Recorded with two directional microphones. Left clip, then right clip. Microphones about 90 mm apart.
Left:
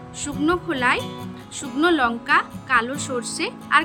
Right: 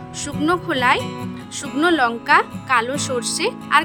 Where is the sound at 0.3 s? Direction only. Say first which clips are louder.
Right 2 dB; 80° right.